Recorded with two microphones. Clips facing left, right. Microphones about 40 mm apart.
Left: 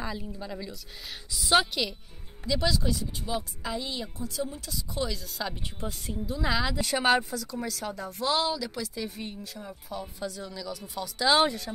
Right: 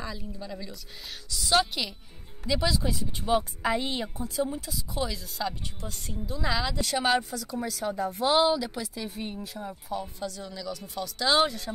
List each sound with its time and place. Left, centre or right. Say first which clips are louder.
0.0 s a woman's voice: left 2 dB; centre
3.2 s speech: right 7 dB; right
4.3 s a woman's voice: right 6 dB; centre
4.6 s speech: even; centre
8.1 s a woman's voice: right 4 dB; centre